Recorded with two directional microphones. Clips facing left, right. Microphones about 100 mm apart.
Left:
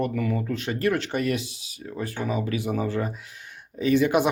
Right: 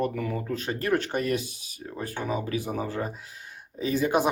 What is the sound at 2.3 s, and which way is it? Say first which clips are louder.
Speech: left 2 dB; 30° right (ahead or behind).